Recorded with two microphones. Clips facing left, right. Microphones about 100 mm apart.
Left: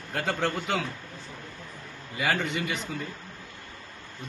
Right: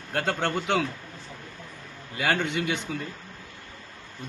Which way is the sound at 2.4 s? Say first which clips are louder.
Right 3 dB; 85° right.